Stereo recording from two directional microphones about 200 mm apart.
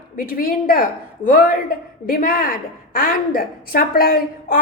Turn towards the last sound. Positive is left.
turn(degrees=45)  # may be behind; listen again after turning